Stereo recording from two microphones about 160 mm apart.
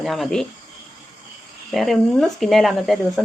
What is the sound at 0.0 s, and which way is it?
Speech, centre (ahead or behind).